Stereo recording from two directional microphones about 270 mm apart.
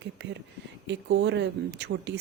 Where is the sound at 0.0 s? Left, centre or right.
Right.